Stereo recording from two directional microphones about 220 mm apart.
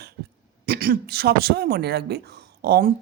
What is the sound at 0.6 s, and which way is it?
Speech, 45° right (ahead or behind).